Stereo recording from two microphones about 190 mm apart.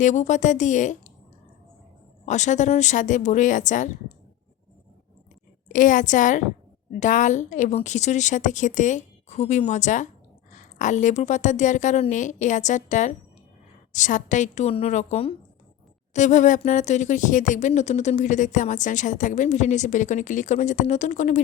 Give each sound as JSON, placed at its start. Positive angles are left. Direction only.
{"t": 0.0, "sound": "speech", "side_deg": 40}
{"t": 2.2, "sound": "speech", "side_deg": 40}
{"t": 5.6, "sound": "a woman's voice", "side_deg": 45}